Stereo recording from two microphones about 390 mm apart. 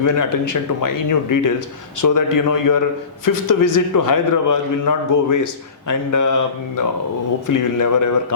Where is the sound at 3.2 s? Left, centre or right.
Left.